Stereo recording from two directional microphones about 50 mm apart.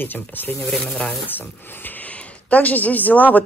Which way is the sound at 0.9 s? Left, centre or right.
Left.